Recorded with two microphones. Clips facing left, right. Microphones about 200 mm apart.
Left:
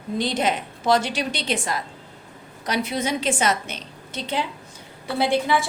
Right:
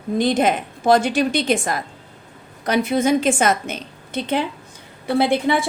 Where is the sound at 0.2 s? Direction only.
50° right (ahead or behind).